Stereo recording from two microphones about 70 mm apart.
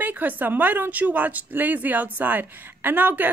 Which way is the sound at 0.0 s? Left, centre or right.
Right.